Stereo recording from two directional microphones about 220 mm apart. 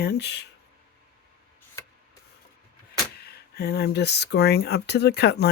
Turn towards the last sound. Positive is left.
turn(degrees=50)  # may be behind; listen again after turning